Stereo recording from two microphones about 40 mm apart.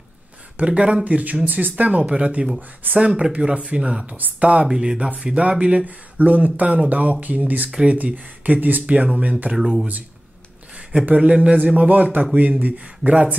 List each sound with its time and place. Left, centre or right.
0.6 s speech: right
4.6 s speech: centre
5.2 s speech: right
5.9 s speech: right
8.5 s speech: right
8.8 s speech: right
9.6 s speech: centre
11.1 s speech: right
11.6 s speech: right